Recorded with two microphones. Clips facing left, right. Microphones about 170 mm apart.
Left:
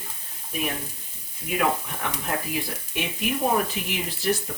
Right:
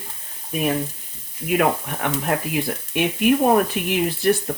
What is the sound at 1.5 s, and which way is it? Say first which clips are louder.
Speech: right 5 dB; 60° right (ahead or behind).